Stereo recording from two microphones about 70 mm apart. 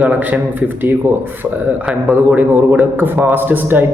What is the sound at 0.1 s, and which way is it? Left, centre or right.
Speech, right.